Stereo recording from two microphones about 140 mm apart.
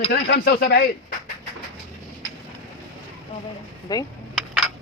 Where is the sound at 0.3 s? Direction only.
90° left.